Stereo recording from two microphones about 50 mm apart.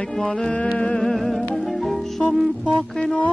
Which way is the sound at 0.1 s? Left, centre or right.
Centre.